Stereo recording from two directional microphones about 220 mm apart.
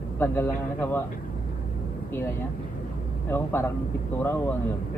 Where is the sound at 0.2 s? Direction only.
10° left (ahead or behind).